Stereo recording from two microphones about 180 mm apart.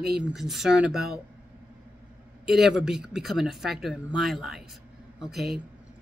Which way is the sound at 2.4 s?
Centre (ahead or behind).